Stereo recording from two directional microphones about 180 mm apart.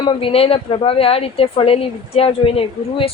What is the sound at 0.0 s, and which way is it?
A woman's voice, 30° left (ahead or behind).